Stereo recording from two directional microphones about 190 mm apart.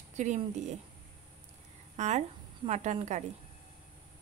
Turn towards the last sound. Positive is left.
turn(degrees=-35)  # may be behind; listen again after turning